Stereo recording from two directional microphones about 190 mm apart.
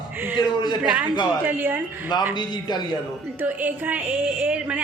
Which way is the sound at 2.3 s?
25° left (ahead or behind).